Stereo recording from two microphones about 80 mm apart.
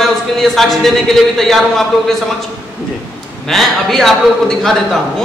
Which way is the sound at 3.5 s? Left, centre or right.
Centre.